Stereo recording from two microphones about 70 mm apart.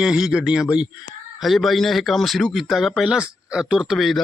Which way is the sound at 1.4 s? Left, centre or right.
Centre.